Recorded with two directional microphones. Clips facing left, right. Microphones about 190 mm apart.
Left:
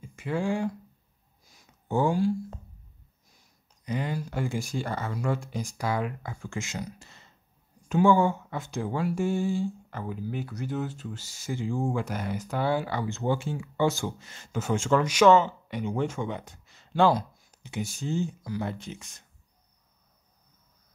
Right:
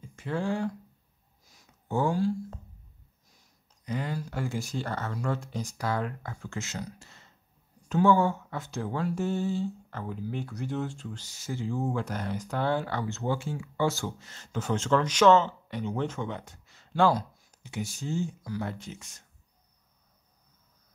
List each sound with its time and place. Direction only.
0.0 s speech: 10° left (ahead or behind)
1.9 s speech: 15° left (ahead or behind)
3.8 s speech: 15° left (ahead or behind)